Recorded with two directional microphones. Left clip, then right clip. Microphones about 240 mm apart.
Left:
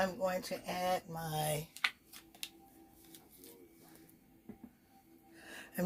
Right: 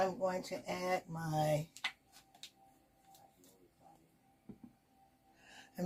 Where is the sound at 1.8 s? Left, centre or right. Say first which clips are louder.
Left 6 dB; left.